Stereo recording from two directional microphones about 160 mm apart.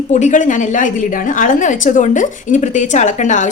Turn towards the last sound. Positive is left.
turn(degrees=50)  # may be behind; listen again after turning